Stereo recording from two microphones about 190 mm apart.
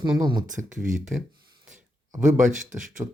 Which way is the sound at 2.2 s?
45° right (ahead or behind).